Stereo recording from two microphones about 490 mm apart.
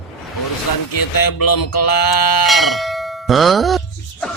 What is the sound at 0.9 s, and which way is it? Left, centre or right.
Speech, left.